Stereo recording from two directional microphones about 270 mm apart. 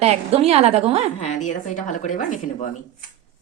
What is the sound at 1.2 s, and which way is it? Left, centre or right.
A woman's voice, left.